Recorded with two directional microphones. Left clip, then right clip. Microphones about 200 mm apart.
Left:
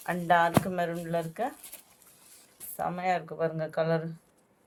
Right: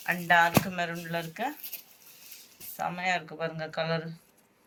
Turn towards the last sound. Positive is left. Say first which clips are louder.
# left 3 dB
turn(degrees=60)  # may be behind; listen again after turning